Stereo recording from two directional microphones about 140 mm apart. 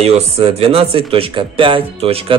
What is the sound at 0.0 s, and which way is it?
A man's voice, 45° right (ahead or behind).